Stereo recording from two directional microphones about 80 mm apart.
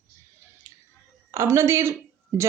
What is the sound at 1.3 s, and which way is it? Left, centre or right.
Speech, right.